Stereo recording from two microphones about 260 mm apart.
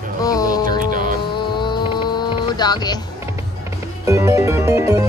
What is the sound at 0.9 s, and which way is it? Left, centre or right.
Music, right.